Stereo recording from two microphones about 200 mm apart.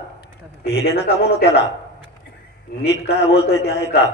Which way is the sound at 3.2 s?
55° left (ahead or behind).